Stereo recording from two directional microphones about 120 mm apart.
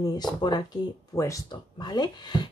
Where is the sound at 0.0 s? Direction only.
35° left (ahead or behind).